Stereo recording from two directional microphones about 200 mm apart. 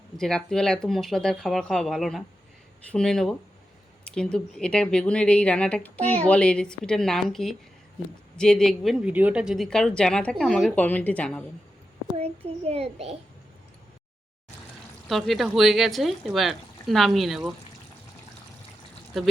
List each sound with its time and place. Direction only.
0.2 s a woman's voice: 5° left (ahead or behind)
12.1 s a child's voice: 30° right (ahead or behind)
15.1 s a woman's voice: centre (ahead or behind)